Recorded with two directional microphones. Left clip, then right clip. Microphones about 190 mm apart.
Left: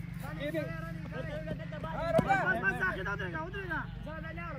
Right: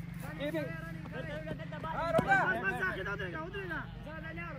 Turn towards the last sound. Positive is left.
turn(degrees=25)  # may be behind; listen again after turning